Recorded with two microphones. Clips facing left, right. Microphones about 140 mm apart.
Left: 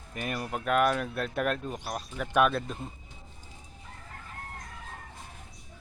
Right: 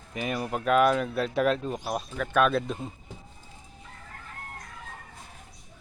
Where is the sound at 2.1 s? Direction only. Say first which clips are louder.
Right 1 dB; 15° left (ahead or behind).